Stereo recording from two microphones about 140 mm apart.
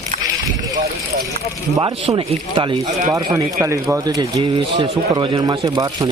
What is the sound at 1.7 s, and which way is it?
Speech, 30° right (ahead or behind).